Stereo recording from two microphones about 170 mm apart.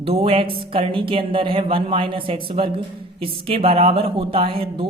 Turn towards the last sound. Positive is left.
turn(degrees=-30)  # may be behind; listen again after turning